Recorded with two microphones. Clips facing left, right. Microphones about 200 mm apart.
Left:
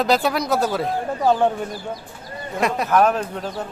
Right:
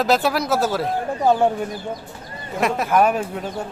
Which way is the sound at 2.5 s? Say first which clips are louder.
Even; centre (ahead or behind).